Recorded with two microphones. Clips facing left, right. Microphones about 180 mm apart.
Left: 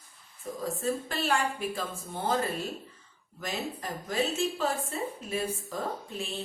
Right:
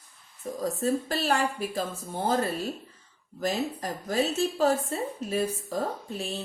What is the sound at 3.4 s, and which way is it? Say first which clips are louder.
A woman's voice: right 6 dB; 40° right (ahead or behind).